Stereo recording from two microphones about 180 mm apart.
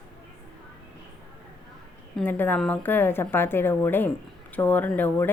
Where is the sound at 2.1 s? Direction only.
10° left (ahead or behind).